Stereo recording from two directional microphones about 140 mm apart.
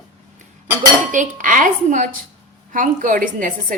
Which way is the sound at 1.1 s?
65° right (ahead or behind).